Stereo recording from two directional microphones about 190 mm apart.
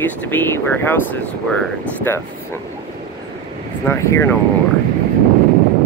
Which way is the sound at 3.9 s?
15° left (ahead or behind).